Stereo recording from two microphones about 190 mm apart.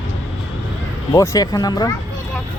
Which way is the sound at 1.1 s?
15° left (ahead or behind).